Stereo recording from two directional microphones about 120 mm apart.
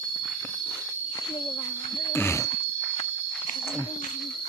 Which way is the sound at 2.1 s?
20° left (ahead or behind).